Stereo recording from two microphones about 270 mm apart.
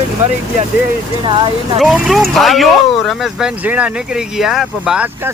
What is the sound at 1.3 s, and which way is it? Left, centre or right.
Speech, centre.